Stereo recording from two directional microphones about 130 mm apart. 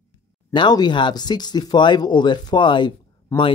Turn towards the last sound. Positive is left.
turn(degrees=20)  # may be behind; listen again after turning